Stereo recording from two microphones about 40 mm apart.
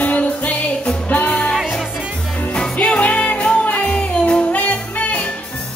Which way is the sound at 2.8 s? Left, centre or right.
Left.